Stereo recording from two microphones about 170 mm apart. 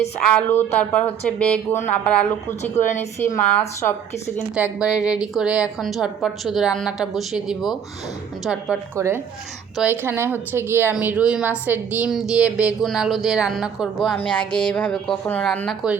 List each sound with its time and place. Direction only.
0.2 s a woman's voice: 10° left (ahead or behind)
2.7 s a woman's voice: 40° left (ahead or behind)
3.2 s a woman's voice: 15° left (ahead or behind)
4.5 s speech: 5° right (ahead or behind)
9.0 s speech: 15° right (ahead or behind); by 15.9 s centre (ahead or behind)